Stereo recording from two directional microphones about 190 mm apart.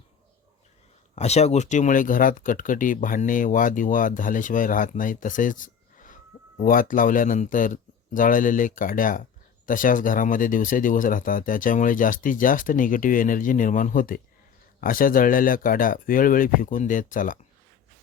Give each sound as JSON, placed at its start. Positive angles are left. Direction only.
{"t": 1.1, "sound": "speech", "side_deg": 35}